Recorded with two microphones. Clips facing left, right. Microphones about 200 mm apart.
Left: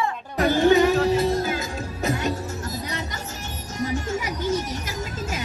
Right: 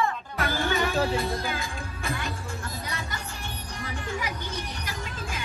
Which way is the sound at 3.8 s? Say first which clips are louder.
Left 7 dB; 45° left (ahead or behind).